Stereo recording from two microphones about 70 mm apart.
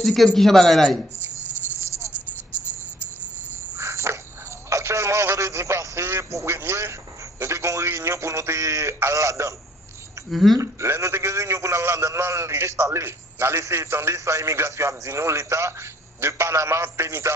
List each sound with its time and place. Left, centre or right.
0.0 s a man's voice: centre
1.8 s a sound: right
3.7 s cricket: right
4.6 s a sound: right
6.6 s a man's voice: right
10.3 s a man's voice: centre
10.6 s a man's voice: right